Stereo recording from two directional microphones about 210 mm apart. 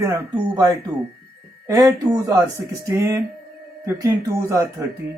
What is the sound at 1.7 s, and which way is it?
Speech, 15° right (ahead or behind).